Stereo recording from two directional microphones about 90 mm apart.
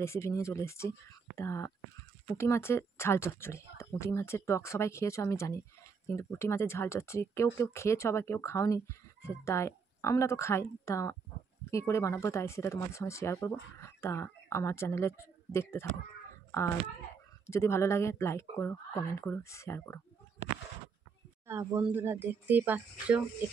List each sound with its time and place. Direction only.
0.0 s speech: 30° left (ahead or behind)
17.5 s speech: 30° left (ahead or behind)
21.5 s speech: 25° right (ahead or behind)